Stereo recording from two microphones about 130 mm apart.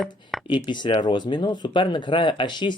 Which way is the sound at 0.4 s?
40° left (ahead or behind).